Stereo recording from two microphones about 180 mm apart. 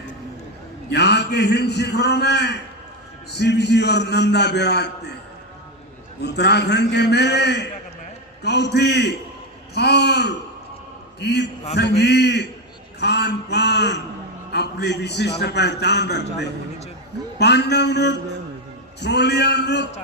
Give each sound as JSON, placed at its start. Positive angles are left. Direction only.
{"t": 0.9, "sound": "a man's voice", "side_deg": 70}
{"t": 6.2, "sound": "a man's voice", "side_deg": 70}